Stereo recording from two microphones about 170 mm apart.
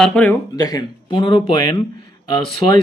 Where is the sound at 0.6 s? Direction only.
25° left (ahead or behind).